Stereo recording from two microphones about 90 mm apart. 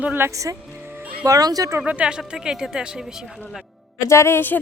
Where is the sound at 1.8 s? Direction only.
10° right (ahead or behind).